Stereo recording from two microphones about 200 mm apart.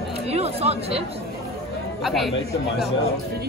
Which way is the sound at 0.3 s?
30° right (ahead or behind).